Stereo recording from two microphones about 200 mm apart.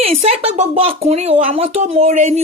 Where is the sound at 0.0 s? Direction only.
30° right (ahead or behind).